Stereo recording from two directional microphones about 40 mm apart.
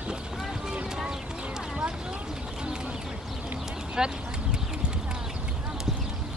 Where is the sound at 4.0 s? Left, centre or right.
Centre.